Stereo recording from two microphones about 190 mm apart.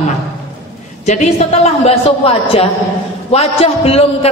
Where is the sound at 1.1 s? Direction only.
35° left (ahead or behind).